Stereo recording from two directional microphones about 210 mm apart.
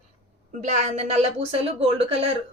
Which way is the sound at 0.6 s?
30° right (ahead or behind).